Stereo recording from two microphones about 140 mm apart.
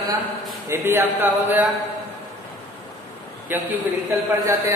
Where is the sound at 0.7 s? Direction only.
15° right (ahead or behind).